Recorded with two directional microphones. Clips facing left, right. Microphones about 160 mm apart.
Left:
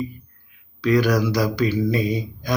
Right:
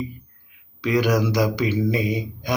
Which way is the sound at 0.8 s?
20° right (ahead or behind).